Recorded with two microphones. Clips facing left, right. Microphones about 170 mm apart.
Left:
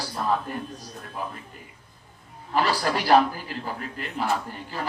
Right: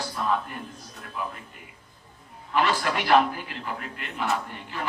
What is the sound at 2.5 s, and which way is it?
A man's voice, 35° left (ahead or behind).